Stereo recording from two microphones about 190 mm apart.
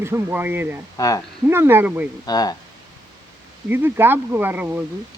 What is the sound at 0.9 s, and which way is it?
Speech, 20° left (ahead or behind).